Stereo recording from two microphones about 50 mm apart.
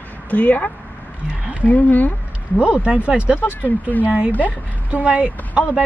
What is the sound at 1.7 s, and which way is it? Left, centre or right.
Speech, left.